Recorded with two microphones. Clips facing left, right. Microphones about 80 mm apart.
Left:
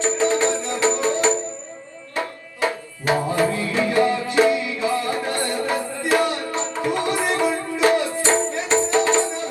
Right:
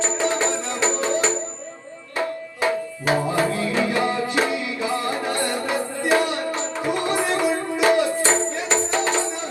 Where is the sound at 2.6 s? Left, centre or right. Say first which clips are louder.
Right 1 dB; right.